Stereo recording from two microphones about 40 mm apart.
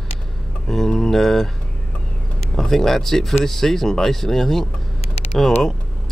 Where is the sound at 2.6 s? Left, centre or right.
Centre.